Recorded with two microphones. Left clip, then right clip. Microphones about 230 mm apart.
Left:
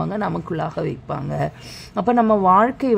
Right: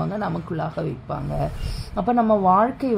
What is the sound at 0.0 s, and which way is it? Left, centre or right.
A woman's voice, left.